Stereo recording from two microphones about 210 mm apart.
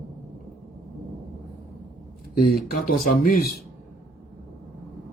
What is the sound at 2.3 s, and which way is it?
Speech, 45° left (ahead or behind).